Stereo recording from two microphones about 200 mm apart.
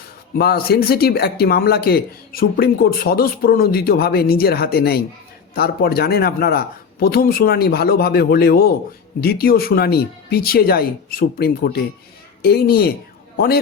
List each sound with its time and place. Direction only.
0.3 s a man's voice: 50° left (ahead or behind)